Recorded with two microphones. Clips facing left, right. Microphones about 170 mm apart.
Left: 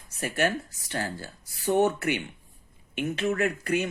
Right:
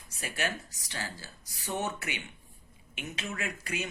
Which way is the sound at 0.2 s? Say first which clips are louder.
Left 8 dB; 55° left (ahead or behind).